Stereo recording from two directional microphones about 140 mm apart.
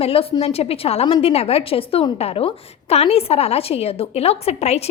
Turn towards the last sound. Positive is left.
turn(degrees=50)  # may be behind; listen again after turning